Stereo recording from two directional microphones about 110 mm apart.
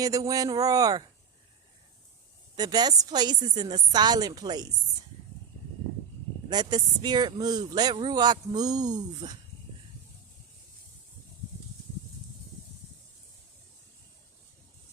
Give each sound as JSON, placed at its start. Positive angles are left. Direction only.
{"t": 0.0, "sound": "speech", "side_deg": -35}
{"t": 2.6, "sound": "speech", "side_deg": -40}
{"t": 6.5, "sound": "speech", "side_deg": -40}